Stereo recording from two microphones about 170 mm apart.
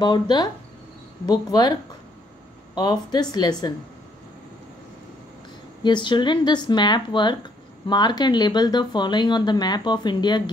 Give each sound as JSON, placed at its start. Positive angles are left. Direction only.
{"t": 0.0, "sound": "speech", "side_deg": 25}
{"t": 1.5, "sound": "speech", "side_deg": 25}
{"t": 5.9, "sound": "speech", "side_deg": 25}